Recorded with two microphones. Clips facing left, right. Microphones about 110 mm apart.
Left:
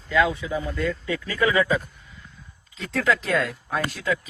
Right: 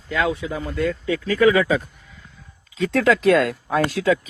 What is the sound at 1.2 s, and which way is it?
Speech, 90° right.